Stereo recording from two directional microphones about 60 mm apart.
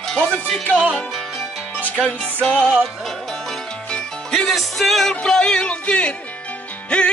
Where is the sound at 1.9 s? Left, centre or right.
Left.